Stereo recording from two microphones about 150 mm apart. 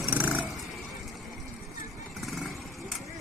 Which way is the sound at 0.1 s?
10° right (ahead or behind).